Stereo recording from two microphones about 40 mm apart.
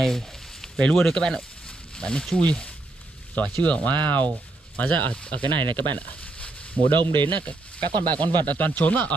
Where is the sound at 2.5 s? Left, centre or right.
Left.